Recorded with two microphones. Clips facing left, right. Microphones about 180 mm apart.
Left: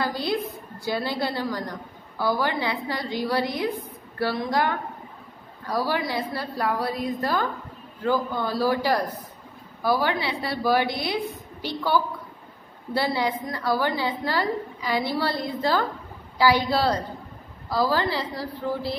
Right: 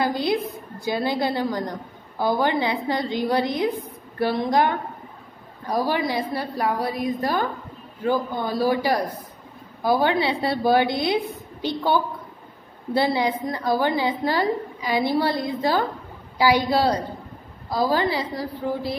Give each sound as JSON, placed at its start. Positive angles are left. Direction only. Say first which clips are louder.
{"t": 0.0, "sound": "a woman's voice", "louder": "right 4 dB", "side_deg": -15}